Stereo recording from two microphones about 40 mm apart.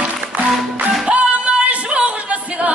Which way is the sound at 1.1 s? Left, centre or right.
Right.